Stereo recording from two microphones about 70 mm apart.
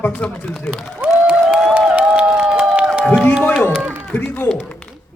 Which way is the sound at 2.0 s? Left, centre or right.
Centre.